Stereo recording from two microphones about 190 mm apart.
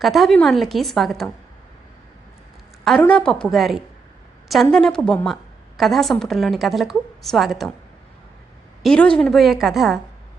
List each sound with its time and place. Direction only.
0.0 s a woman's voice: centre (ahead or behind)
2.8 s a woman's voice: 5° left (ahead or behind)
8.8 s a woman's voice: 5° left (ahead or behind)